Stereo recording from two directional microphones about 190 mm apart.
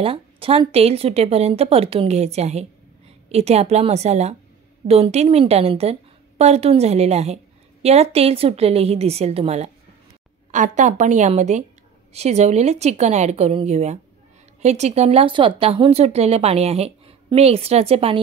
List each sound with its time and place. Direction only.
0.0 s speech: 30° right (ahead or behind)